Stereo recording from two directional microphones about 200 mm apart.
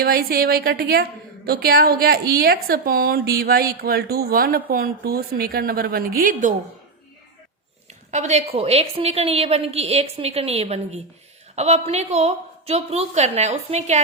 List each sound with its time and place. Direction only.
0.0 s a woman's voice: 50° right (ahead or behind)
8.1 s a woman's voice: 35° right (ahead or behind)